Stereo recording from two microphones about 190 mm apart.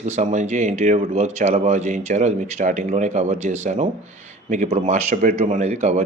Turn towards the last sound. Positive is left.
turn(degrees=-35)  # may be behind; listen again after turning